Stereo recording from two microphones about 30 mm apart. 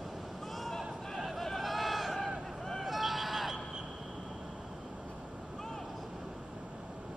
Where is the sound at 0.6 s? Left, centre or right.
Centre.